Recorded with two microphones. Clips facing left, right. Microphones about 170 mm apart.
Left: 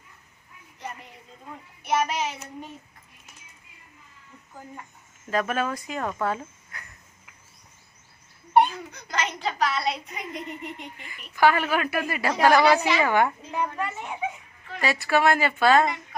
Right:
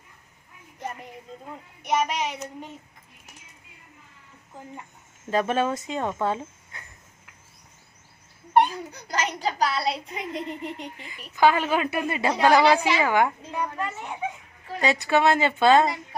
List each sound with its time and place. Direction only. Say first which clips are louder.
1.8 s child singing: even; 15° right (ahead or behind)
4.5 s speech: right 1 dB; 25° right (ahead or behind)
8.7 s a woman's voice: right 2 dB; 35° right (ahead or behind)
11.3 s speech: right 1 dB; 20° right (ahead or behind)
12.4 s child singing: even; 20° right (ahead or behind)
13.7 s a child's voice: even; 10° left (ahead or behind)
14.8 s speech: right 1 dB; 20° right (ahead or behind)